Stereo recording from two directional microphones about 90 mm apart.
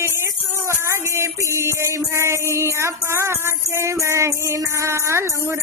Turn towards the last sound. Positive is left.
turn(degrees=-30)  # may be behind; listen again after turning